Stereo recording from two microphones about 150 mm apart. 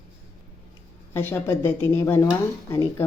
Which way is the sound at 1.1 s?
15° left (ahead or behind).